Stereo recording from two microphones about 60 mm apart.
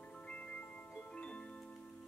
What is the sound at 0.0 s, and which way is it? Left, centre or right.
Music, centre.